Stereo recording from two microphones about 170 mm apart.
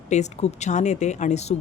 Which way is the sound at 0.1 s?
40° left (ahead or behind).